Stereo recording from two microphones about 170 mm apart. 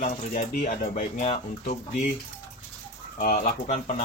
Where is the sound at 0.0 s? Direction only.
60° left (ahead or behind).